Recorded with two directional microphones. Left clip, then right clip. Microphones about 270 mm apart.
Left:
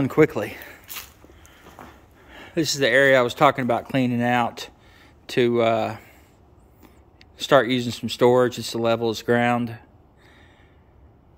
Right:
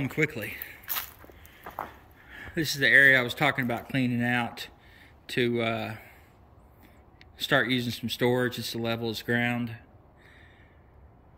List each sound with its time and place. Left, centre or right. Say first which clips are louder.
0.0 s speech: left 10 dB; centre
2.3 s speech: left 6 dB; centre
7.4 s speech: left 7 dB; centre